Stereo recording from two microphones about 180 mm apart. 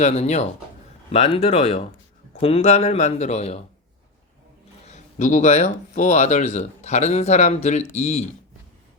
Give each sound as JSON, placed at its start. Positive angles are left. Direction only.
{"t": 0.0, "sound": "speech", "side_deg": 35}
{"t": 4.9, "sound": "speech", "side_deg": 40}